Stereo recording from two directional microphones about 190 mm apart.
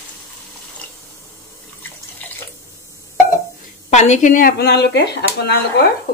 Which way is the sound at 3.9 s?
40° left (ahead or behind).